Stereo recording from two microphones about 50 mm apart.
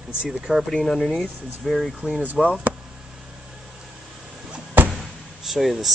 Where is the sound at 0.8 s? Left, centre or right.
Centre.